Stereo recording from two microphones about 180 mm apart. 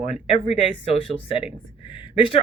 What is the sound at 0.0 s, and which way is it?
Speech, 35° left (ahead or behind).